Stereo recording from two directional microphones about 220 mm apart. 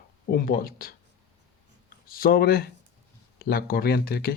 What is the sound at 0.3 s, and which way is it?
Speech, 40° left (ahead or behind).